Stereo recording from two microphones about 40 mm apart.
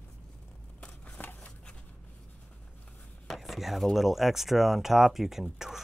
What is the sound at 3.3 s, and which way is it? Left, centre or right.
Chopping, centre.